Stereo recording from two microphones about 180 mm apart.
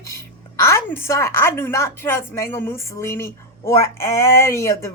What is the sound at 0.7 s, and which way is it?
A woman's voice, 15° left (ahead or behind).